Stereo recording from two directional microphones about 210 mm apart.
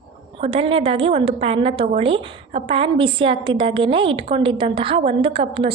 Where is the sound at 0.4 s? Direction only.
25° right (ahead or behind).